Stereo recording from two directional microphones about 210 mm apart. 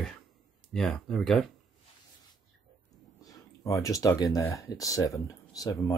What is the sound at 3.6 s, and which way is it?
Speech, 15° left (ahead or behind).